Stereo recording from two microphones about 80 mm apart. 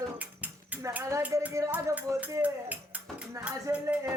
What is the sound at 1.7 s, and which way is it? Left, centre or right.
Music, centre.